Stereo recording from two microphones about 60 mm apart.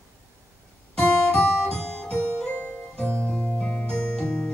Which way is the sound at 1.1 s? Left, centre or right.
Centre.